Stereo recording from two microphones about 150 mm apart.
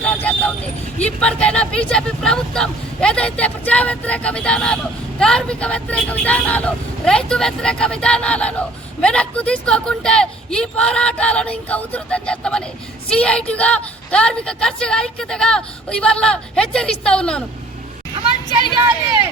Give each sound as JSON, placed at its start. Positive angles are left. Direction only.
{"t": 0.0, "sound": "a woman's voice", "side_deg": 10}